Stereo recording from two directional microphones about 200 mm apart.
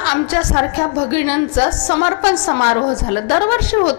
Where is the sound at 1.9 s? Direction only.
25° left (ahead or behind).